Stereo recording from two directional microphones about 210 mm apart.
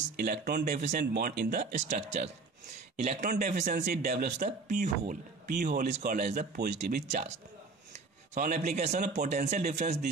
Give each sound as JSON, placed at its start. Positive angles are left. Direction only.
{"t": 0.1, "sound": "speech", "side_deg": -45}
{"t": 3.0, "sound": "speech", "side_deg": -35}
{"t": 7.0, "sound": "speech", "side_deg": -35}